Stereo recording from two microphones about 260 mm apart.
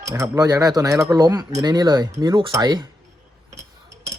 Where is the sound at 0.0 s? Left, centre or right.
Centre.